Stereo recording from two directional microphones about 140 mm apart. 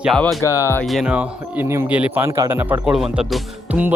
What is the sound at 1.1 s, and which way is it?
A man's voice, 15° right (ahead or behind).